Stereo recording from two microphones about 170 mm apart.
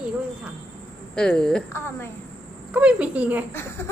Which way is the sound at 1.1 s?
5° left (ahead or behind).